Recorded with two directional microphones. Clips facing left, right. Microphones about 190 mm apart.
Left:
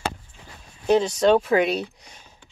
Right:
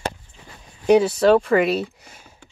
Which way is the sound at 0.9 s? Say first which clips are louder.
Right 3 dB; 5° right (ahead or behind).